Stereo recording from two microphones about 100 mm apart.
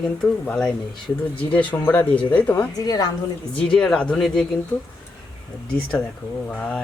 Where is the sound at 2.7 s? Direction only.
40° left (ahead or behind).